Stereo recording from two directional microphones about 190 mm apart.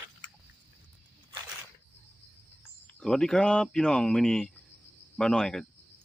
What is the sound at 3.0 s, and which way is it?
Speech, 5° left (ahead or behind).